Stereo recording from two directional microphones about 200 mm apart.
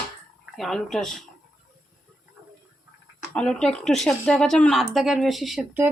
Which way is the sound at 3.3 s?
5° left (ahead or behind).